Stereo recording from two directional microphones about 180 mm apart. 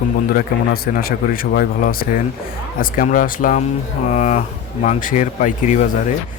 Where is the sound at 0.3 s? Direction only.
55° left (ahead or behind).